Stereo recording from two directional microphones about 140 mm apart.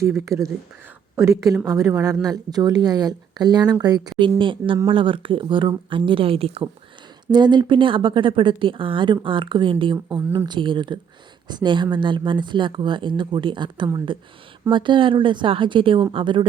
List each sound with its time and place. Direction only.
0.0 s speech: 20° right (ahead or behind)